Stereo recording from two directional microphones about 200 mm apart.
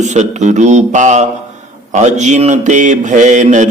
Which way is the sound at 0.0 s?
35° right (ahead or behind).